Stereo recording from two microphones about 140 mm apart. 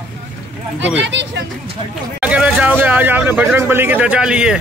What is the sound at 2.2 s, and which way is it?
Jingle bell, 10° right (ahead or behind).